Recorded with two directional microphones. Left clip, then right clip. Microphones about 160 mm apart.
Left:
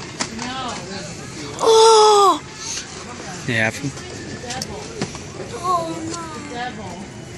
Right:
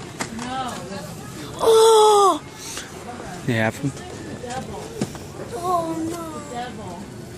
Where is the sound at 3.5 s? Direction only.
30° right (ahead or behind).